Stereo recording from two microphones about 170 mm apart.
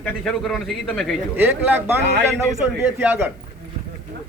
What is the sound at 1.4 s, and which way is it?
Speech, 10° right (ahead or behind).